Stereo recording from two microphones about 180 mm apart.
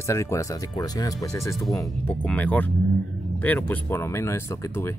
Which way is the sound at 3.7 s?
10° left (ahead or behind).